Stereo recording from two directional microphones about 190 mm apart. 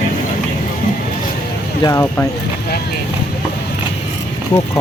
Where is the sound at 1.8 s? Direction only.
15° left (ahead or behind).